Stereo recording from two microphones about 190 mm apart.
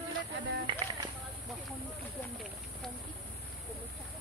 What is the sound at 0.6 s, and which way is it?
Run, 25° right (ahead or behind).